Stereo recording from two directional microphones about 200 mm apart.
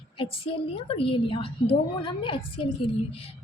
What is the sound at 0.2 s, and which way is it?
A woman's voice, 25° left (ahead or behind).